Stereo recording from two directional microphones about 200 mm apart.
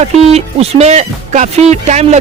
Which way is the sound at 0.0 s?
30° right (ahead or behind).